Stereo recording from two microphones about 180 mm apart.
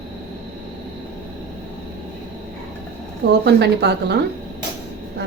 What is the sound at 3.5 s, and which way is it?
Speech, 70° right (ahead or behind).